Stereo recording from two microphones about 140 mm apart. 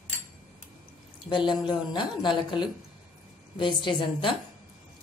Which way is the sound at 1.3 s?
35° left (ahead or behind).